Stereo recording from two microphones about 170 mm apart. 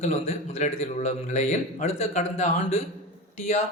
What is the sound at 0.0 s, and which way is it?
A man's voice, 40° left (ahead or behind).